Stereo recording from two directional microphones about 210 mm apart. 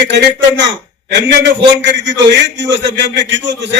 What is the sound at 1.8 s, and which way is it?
A man's voice, 55° right (ahead or behind).